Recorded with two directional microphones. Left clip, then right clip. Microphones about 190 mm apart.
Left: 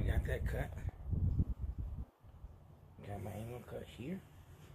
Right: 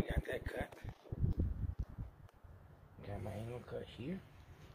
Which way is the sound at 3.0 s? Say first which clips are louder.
Even; 35° right (ahead or behind).